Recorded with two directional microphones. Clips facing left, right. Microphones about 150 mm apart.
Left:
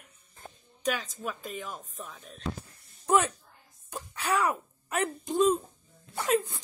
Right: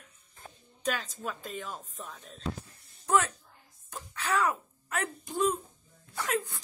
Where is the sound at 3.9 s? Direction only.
15° left (ahead or behind).